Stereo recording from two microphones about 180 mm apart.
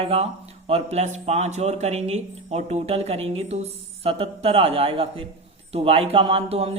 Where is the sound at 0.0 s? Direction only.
30° right (ahead or behind).